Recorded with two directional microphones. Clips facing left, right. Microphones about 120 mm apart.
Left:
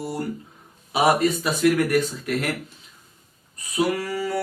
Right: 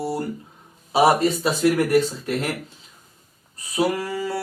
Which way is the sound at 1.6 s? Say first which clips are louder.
Right 1 dB; 30° right (ahead or behind).